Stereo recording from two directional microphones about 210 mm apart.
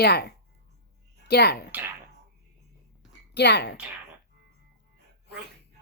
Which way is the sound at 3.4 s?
55° left (ahead or behind).